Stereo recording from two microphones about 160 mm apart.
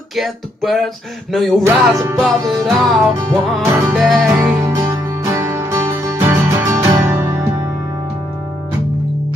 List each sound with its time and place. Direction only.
0.1 s music: centre (ahead or behind)
1.7 s music: 15° right (ahead or behind)
2.1 s music: centre (ahead or behind)
4.6 s music: 15° right (ahead or behind)